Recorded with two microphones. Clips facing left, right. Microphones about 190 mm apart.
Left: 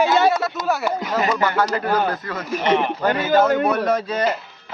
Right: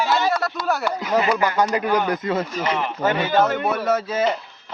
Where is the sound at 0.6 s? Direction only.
Centre (ahead or behind).